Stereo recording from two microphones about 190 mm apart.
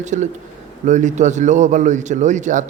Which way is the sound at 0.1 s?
40° right (ahead or behind).